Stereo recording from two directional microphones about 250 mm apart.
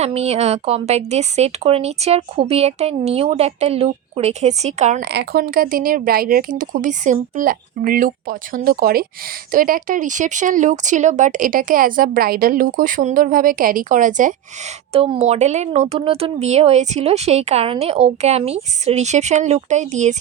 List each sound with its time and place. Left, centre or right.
0.0 s a woman's voice: right